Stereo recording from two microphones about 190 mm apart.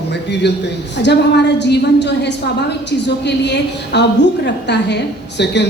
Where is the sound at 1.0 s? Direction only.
65° left (ahead or behind).